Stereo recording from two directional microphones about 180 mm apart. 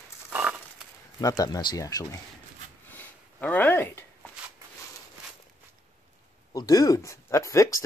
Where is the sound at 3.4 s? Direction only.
10° left (ahead or behind).